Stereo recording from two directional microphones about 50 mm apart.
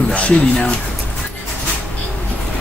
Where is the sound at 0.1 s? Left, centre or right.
Left.